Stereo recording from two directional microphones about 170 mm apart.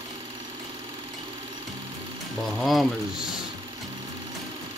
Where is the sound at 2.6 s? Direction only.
Centre (ahead or behind).